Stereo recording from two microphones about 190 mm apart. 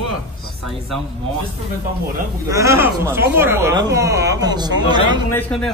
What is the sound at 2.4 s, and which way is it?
Speech, 15° right (ahead or behind).